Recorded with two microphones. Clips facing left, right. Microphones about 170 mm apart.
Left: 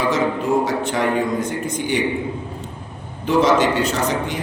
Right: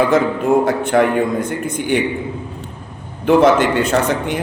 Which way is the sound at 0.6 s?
55° right (ahead or behind).